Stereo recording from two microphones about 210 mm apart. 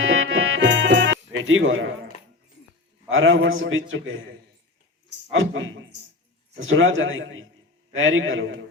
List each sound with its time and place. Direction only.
0.0 s music: 70° right (ahead or behind)
3.1 s a man's voice: 70° right (ahead or behind)